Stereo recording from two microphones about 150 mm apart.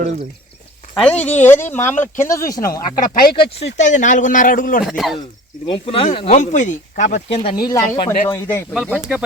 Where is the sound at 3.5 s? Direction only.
50° left (ahead or behind).